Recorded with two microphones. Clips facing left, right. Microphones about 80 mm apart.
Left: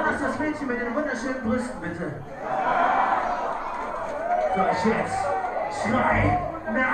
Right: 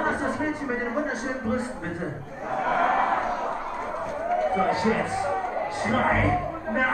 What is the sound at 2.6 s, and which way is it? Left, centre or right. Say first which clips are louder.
Crowd: left 1 dB; left.